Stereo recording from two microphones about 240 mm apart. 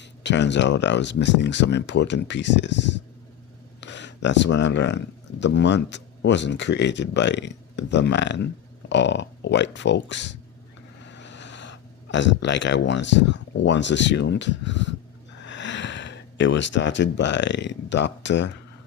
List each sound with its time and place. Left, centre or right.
0.0 s speech: left